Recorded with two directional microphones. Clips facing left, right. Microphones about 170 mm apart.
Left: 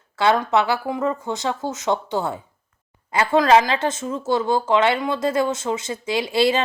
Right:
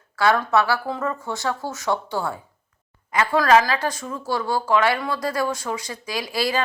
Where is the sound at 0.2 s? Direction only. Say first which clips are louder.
Left 1 dB; 20° left (ahead or behind).